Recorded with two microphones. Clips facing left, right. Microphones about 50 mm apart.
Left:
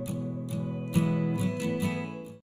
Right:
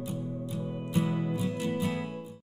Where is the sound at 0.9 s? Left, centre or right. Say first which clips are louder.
Left 2 dB; left.